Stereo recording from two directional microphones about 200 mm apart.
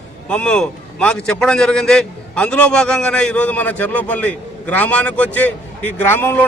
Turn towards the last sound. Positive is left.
turn(degrees=10)  # may be behind; listen again after turning